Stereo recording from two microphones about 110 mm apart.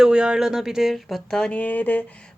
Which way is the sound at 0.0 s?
5° right (ahead or behind).